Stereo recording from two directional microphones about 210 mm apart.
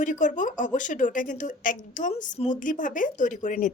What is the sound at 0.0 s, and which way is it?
A woman's voice, 40° left (ahead or behind).